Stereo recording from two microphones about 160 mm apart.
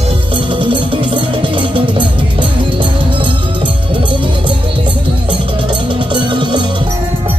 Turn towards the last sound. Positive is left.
turn(degrees=-30)  # may be behind; listen again after turning